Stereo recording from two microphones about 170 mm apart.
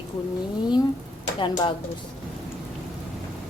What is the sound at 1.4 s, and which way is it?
Speech, 30° left (ahead or behind).